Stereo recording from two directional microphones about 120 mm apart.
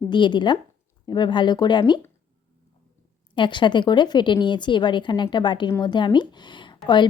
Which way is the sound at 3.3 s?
40° left (ahead or behind).